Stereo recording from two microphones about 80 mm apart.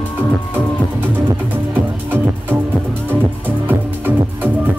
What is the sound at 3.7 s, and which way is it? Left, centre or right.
Music, right.